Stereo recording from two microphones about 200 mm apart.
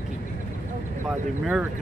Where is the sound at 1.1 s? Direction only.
5° right (ahead or behind).